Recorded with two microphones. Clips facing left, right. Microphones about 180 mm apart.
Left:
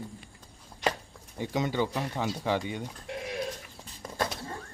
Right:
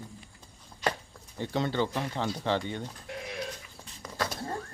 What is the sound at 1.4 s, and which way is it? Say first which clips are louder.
Speech: even; 15° left (ahead or behind).